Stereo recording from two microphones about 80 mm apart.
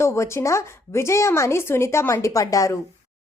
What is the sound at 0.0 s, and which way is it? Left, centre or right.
A woman's voice, left.